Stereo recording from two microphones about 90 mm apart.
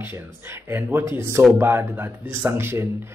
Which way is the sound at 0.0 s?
25° right (ahead or behind).